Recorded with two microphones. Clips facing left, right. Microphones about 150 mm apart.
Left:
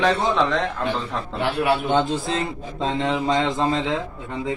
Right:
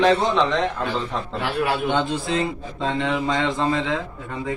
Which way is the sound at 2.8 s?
30° left (ahead or behind).